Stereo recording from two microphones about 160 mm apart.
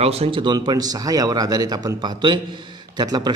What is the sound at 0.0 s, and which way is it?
A man's voice, 40° right (ahead or behind).